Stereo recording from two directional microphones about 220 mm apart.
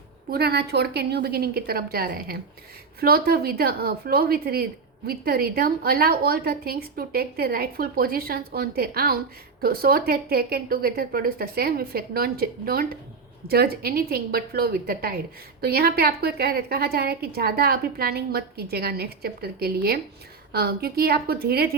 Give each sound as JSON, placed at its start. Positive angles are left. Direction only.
{"t": 0.3, "sound": "a woman's voice", "side_deg": -45}